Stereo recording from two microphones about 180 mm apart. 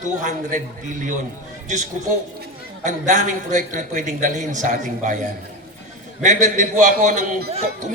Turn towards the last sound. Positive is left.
turn(degrees=-40)  # may be behind; listen again after turning